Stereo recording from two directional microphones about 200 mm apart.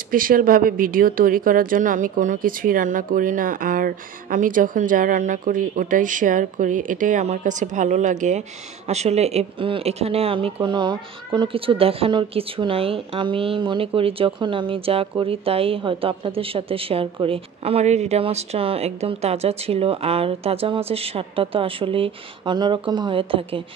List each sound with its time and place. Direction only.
0.1 s speech: 45° right (ahead or behind); by 23.6 s 25° right (ahead or behind)